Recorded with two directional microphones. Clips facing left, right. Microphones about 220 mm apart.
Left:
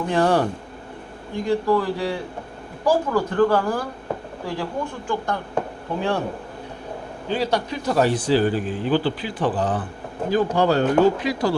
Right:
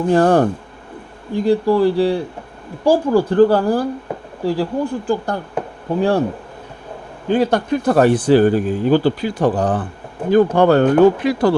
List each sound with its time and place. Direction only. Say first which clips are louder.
0.1 s speech: right 6 dB; 45° right (ahead or behind)
1.5 s speech: right 6 dB; 35° right (ahead or behind)
7.3 s speech: right 7 dB; 50° right (ahead or behind)
10.2 s speech: right 7 dB; 55° right (ahead or behind)